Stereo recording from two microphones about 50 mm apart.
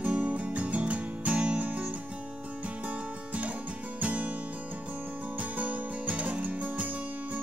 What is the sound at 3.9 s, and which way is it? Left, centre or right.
Music, right.